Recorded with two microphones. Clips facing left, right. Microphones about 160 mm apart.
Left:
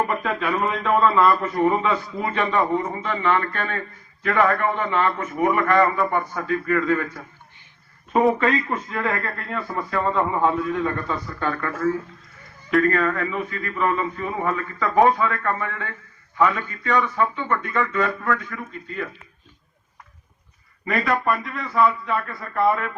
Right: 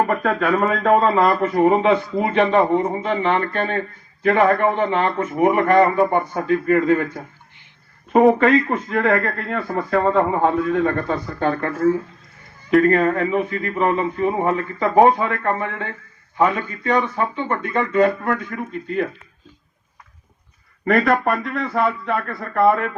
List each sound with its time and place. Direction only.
0.1 s a man's voice: 50° right (ahead or behind); by 7.2 s 25° right (ahead or behind)
8.4 s a man's voice: 50° right (ahead or behind)
9.4 s a man's voice: 35° right (ahead or behind)
20.8 s a man's voice: 55° right (ahead or behind)